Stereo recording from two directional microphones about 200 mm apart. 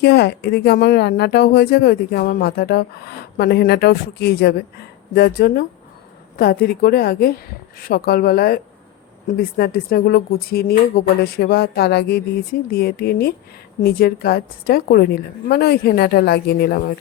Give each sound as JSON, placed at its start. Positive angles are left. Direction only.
{"t": 0.0, "sound": "speech", "side_deg": 55}